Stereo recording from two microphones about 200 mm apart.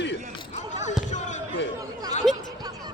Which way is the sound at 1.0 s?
35° left (ahead or behind).